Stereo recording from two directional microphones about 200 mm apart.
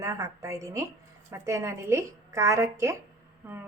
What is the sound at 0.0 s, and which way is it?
A woman's voice, 15° right (ahead or behind).